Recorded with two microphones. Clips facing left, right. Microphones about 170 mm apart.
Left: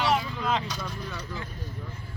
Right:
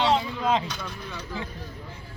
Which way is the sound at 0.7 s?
Centre (ahead or behind).